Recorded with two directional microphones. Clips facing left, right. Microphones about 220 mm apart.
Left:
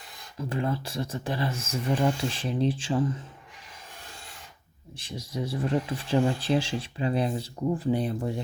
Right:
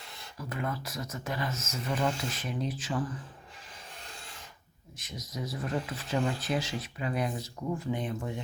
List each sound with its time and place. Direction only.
0.3 s speech: 30° left (ahead or behind)
4.9 s speech: 30° left (ahead or behind)